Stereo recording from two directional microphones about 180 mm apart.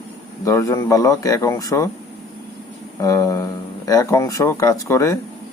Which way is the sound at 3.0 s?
20° left (ahead or behind).